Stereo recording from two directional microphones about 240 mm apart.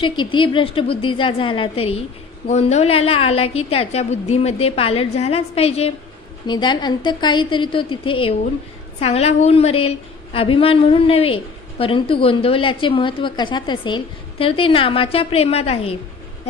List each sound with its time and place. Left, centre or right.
0.0 s a woman's voice: centre